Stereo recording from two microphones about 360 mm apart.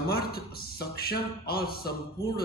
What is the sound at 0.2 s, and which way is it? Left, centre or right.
Speech, left.